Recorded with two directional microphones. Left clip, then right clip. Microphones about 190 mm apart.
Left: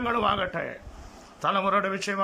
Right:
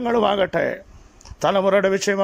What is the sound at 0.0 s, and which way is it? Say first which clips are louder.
Speech: right 6 dB; 40° right (ahead or behind).